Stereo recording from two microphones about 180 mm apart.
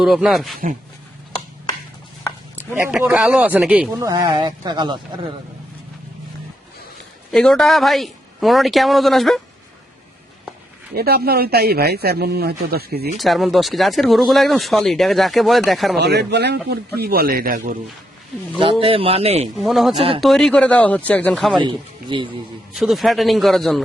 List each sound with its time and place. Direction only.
0.0 s speech: centre (ahead or behind)
2.7 s speech: 10° right (ahead or behind)
4.0 s speech: 20° right (ahead or behind)
7.3 s speech: 5° left (ahead or behind)
10.9 s speech: 60° right (ahead or behind)
13.1 s speech: centre (ahead or behind)
16.0 s speech: 65° right (ahead or behind)
18.6 s a man's voice: 30° right (ahead or behind)
19.5 s speech: centre (ahead or behind)
20.0 s a man's voice: 30° right (ahead or behind)
20.2 s speech: 5° left (ahead or behind)
21.6 s speech: 25° right (ahead or behind)
22.7 s speech: centre (ahead or behind)